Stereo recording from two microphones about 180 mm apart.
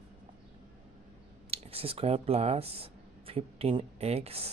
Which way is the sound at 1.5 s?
35° right (ahead or behind).